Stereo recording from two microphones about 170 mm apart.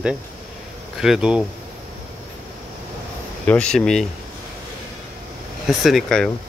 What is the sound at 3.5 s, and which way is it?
Speech, 5° left (ahead or behind).